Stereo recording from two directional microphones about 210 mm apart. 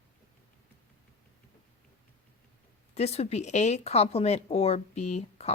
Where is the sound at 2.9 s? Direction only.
30° left (ahead or behind).